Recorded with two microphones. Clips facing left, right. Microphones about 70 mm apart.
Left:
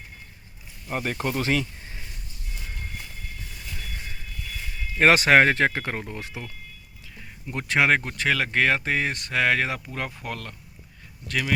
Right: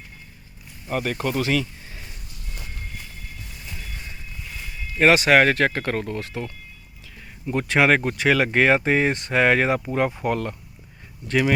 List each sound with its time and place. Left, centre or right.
0.9 s speech: left
1.4 s a sound: left
4.9 s speech: left; by 6.4 s centre
7.4 s speech: centre; by 11.5 s right